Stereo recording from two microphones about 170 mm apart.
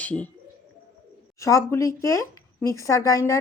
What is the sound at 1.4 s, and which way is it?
Speech, 20° left (ahead or behind).